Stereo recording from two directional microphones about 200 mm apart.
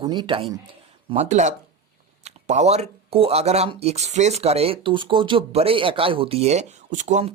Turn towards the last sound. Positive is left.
turn(degrees=-35)  # may be behind; listen again after turning